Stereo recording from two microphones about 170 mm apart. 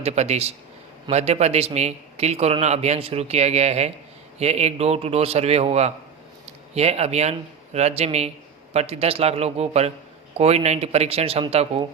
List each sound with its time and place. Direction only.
0.0 s a man's voice: 40° right (ahead or behind)